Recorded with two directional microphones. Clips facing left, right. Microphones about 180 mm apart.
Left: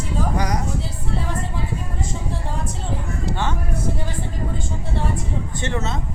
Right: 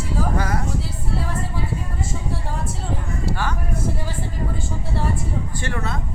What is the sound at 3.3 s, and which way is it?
Speech, 25° left (ahead or behind).